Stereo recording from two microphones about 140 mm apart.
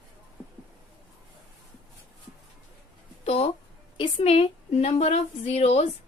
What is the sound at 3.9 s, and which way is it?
A woman's voice, 40° left (ahead or behind).